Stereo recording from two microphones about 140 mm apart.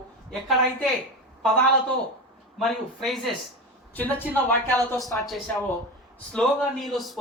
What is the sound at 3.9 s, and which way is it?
A woman's voice, 10° left (ahead or behind).